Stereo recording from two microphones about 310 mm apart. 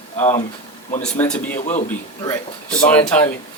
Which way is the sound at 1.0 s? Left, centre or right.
Centre.